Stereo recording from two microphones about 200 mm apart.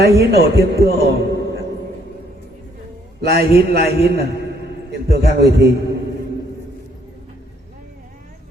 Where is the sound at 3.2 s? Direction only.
50° right (ahead or behind).